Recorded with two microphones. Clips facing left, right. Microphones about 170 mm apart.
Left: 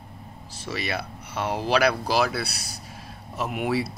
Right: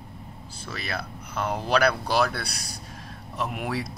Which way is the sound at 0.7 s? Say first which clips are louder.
Left 4 dB; 10° left (ahead or behind).